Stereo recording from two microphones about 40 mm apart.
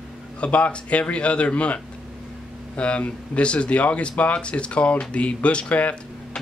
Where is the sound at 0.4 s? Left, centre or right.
Left.